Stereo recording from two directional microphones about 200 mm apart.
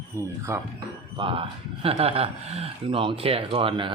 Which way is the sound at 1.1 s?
25° right (ahead or behind).